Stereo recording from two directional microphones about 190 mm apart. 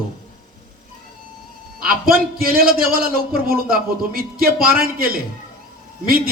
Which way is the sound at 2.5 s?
50° right (ahead or behind).